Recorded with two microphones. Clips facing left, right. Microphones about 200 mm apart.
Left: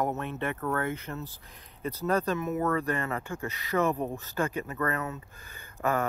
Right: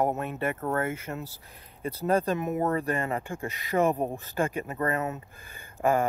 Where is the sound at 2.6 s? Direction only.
35° right (ahead or behind).